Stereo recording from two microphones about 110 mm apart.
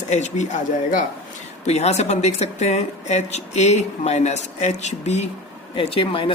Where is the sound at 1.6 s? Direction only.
85° left.